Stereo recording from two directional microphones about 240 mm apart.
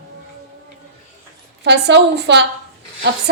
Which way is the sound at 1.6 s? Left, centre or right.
Right.